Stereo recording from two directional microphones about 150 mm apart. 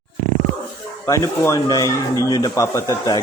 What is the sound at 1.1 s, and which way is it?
Speech, 20° left (ahead or behind).